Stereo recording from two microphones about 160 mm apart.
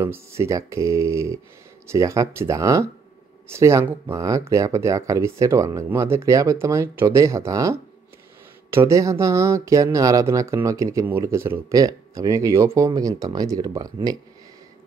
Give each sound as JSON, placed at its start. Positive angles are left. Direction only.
{"t": 0.0, "sound": "speech", "side_deg": -15}